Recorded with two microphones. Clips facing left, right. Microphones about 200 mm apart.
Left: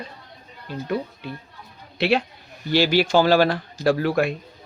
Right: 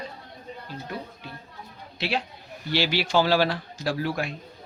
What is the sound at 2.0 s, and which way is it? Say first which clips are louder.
Speech: left 8 dB; 60° left (ahead or behind).